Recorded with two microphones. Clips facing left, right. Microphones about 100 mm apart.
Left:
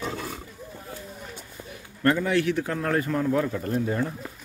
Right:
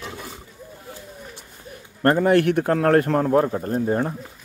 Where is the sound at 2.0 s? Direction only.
45° right (ahead or behind).